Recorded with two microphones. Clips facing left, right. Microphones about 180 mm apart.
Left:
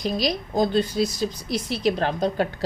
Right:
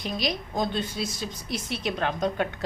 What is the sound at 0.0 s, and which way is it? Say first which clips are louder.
A woman's voice: left 5 dB; 35° left (ahead or behind).